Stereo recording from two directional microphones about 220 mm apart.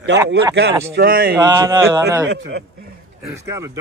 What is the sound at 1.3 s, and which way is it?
Speech, 10° right (ahead or behind).